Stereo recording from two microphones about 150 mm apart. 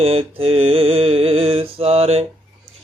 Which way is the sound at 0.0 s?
40° right (ahead or behind).